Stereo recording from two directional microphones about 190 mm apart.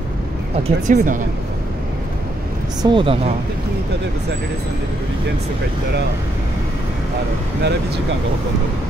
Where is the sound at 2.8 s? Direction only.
25° right (ahead or behind).